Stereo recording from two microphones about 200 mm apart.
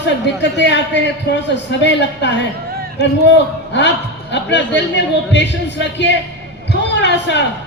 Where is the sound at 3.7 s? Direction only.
60° left (ahead or behind).